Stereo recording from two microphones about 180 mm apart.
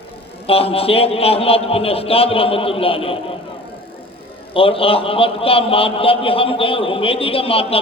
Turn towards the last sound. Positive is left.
turn(degrees=30)  # may be behind; listen again after turning